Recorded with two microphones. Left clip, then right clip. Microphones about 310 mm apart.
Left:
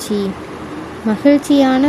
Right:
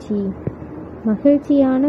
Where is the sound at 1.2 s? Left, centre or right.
Right.